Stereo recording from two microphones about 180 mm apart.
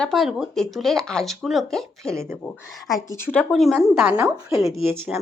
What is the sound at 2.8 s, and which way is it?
Speech, 20° left (ahead or behind).